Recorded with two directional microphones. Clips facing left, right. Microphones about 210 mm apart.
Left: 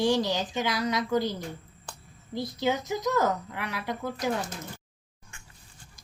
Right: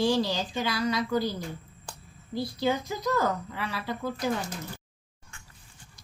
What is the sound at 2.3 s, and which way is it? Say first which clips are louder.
A woman's voice: even; 20° left (ahead or behind).